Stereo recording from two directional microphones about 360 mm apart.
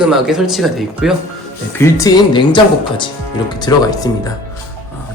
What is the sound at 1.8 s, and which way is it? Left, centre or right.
Speech, centre.